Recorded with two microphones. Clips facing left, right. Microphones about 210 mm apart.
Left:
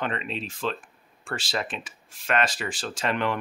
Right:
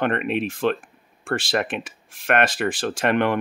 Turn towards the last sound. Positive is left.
turn(degrees=-60)  # may be behind; listen again after turning